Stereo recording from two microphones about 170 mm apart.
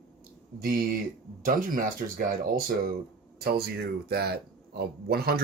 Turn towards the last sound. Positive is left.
turn(degrees=-65)  # may be behind; listen again after turning